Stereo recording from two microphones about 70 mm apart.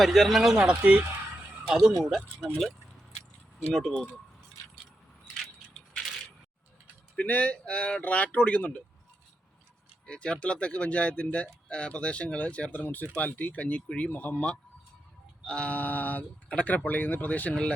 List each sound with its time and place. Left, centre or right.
0.0 s speech: centre
0.5 s a sound: right
2.0 s speech: centre
3.7 s speech: centre
7.2 s speech: left
10.1 s speech: centre
17.5 s speech: centre